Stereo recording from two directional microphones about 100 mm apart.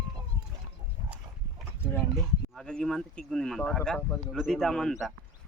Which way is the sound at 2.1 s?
5° left (ahead or behind).